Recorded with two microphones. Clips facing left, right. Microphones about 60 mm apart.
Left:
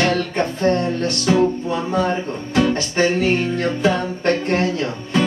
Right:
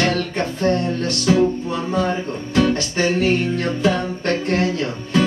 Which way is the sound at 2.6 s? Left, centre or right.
Left.